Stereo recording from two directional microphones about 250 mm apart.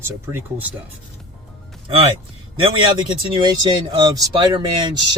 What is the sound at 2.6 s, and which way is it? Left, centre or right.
Speech, centre.